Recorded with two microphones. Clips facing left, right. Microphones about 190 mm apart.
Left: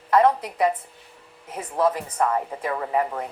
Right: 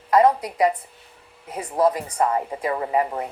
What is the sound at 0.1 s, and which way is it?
A woman's voice, 10° right (ahead or behind).